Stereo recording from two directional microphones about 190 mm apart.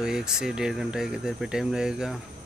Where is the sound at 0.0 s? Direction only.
5° right (ahead or behind).